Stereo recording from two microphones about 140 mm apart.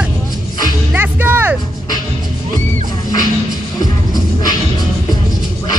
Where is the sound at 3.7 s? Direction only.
30° left (ahead or behind).